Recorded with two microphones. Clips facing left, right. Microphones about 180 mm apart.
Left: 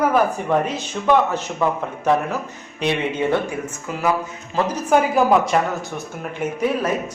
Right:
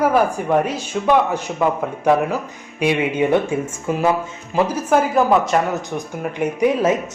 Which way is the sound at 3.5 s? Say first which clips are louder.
Right 6 dB; 25° right (ahead or behind).